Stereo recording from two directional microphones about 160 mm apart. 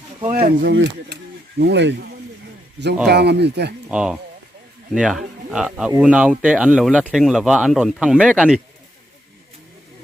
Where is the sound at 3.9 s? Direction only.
5° right (ahead or behind).